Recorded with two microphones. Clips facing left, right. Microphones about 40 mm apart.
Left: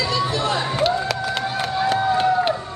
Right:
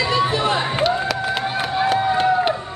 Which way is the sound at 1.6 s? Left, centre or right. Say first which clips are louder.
Right 1 dB; centre.